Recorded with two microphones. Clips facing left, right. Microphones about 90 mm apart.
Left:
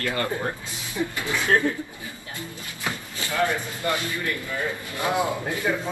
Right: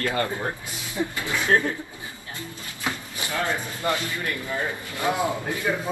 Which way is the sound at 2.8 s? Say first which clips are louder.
Right 1 dB; 20° right (ahead or behind).